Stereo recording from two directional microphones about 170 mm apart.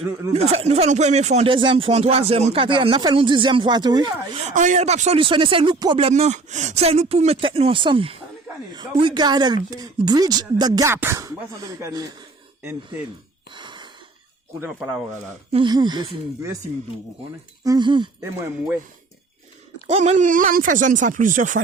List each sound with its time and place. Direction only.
0.3 s speech: 40° right (ahead or behind)
4.4 s speech: 50° right (ahead or behind)
5.2 s speech: 30° right (ahead or behind)
13.5 s a sound: 30° right (ahead or behind)
14.6 s speech: 5° right (ahead or behind)
15.5 s speech: 25° right (ahead or behind)
17.6 s speech: 25° right (ahead or behind)
18.2 s speech: 15° right (ahead or behind)
19.9 s speech: 40° right (ahead or behind)